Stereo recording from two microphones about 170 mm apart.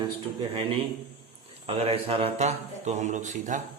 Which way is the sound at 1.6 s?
35° right (ahead or behind).